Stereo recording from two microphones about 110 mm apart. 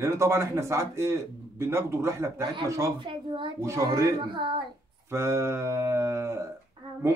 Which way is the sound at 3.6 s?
30° right (ahead or behind).